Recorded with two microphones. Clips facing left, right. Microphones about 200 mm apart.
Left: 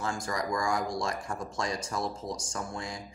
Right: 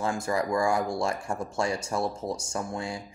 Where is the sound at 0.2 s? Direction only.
25° right (ahead or behind).